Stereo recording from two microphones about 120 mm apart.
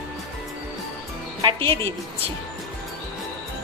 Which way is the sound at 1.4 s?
45° right (ahead or behind).